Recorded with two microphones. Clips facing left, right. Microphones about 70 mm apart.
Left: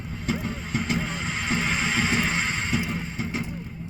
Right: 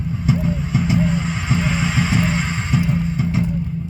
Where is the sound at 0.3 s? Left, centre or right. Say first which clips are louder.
Right 8 dB; centre.